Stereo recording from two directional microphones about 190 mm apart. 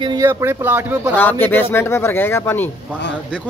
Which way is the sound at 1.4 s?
10° left (ahead or behind).